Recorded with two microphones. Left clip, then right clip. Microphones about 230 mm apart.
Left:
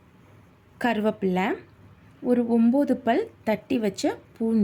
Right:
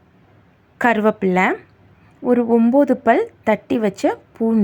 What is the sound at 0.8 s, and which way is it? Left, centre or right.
A woman's voice, centre.